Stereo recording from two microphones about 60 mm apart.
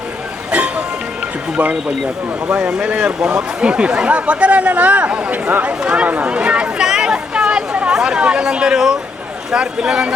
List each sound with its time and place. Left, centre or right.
2.5 s speech: centre